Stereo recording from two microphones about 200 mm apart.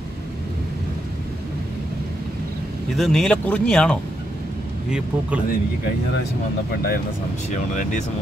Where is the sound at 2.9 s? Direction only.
Centre (ahead or behind).